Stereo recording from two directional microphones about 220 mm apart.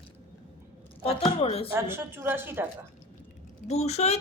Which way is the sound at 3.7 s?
30° left (ahead or behind).